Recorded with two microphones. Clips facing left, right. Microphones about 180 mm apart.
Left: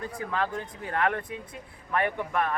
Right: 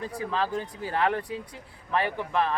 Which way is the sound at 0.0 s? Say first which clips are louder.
Right 1 dB; 30° right (ahead or behind).